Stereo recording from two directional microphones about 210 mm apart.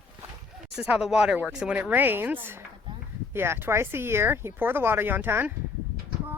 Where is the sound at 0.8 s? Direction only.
5° right (ahead or behind).